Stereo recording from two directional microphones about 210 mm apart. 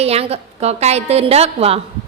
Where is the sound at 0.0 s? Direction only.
30° right (ahead or behind).